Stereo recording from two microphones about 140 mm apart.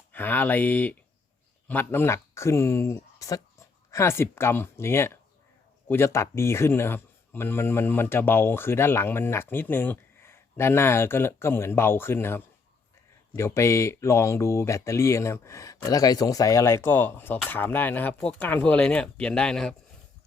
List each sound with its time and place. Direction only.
0.1 s speech: 15° left (ahead or behind)